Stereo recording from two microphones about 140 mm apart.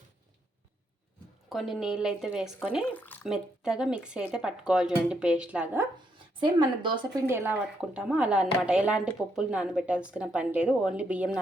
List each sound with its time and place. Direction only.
1.5 s speech: centre (ahead or behind)
2.9 s speech: 15° left (ahead or behind)
3.2 s speech: 5° right (ahead or behind)
6.4 s speech: 35° right (ahead or behind)
7.3 s speech: 15° right (ahead or behind)